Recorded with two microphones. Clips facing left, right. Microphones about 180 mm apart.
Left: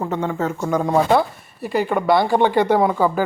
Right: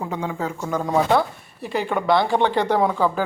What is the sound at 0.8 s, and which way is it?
Speech, 5° left (ahead or behind).